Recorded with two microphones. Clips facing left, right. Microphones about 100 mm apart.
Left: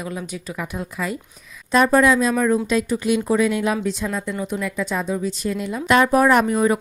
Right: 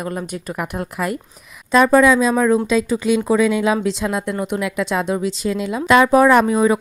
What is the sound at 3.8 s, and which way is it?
Speech, 90° right.